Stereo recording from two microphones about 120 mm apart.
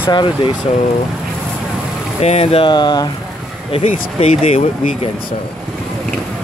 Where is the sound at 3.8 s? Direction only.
65° left (ahead or behind).